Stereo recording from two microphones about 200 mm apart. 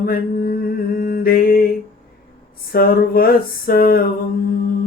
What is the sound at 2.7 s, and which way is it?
Mantra, 50° left (ahead or behind).